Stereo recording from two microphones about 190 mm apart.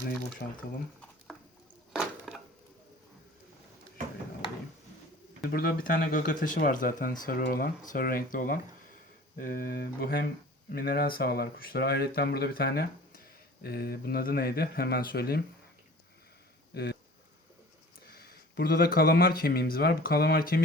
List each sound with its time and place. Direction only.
0.4 s speech: 55° left (ahead or behind)
1.9 s a sound: 5° right (ahead or behind)
5.4 s speech: 55° left (ahead or behind)
16.7 s speech: 55° left (ahead or behind)
18.1 s speech: 55° left (ahead or behind)